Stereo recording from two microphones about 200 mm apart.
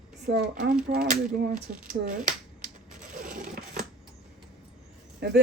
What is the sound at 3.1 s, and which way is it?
Crushing, 40° right (ahead or behind).